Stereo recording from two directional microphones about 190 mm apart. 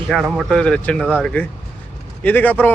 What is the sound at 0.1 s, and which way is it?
A man's voice, centre (ahead or behind).